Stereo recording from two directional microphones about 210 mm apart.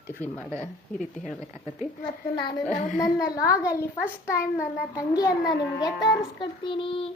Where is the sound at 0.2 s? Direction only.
10° left (ahead or behind).